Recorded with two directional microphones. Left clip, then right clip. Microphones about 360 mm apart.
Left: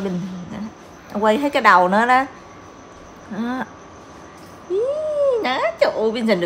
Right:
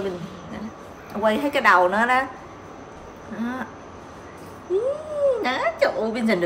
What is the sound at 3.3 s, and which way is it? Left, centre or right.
Speech, left.